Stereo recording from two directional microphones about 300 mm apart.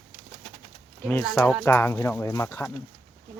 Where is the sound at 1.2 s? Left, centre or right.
Centre.